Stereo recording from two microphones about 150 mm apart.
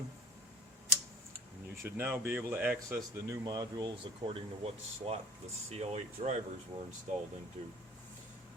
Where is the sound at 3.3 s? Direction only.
25° right (ahead or behind); by 6.3 s 45° right (ahead or behind).